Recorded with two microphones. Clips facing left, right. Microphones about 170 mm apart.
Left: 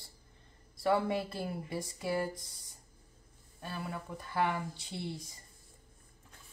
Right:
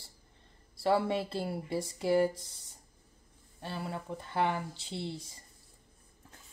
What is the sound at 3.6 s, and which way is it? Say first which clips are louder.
Speech: right 2 dB; 25° right (ahead or behind).